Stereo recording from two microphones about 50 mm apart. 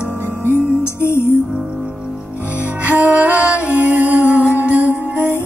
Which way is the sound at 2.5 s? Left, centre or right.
Right.